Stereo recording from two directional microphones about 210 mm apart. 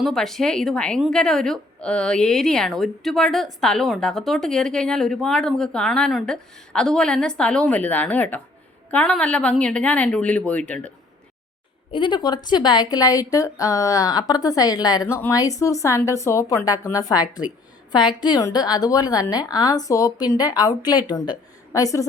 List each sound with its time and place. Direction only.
0.0 s a woman's voice: centre (ahead or behind)
11.9 s a woman's voice: 25° left (ahead or behind)